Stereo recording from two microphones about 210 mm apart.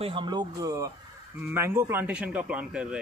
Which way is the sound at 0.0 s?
25° right (ahead or behind).